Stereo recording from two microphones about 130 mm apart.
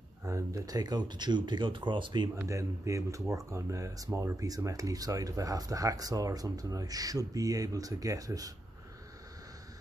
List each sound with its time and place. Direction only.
0.2 s speech: 25° right (ahead or behind)
2.4 s speech: 25° right (ahead or behind)